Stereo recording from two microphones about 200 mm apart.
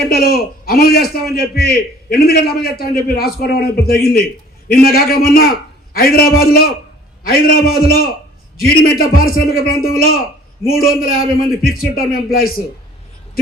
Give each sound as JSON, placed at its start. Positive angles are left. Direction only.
{"t": 0.1, "sound": "a man's voice", "side_deg": 50}